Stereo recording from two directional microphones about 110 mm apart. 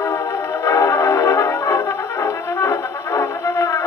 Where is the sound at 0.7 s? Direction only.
25° left (ahead or behind).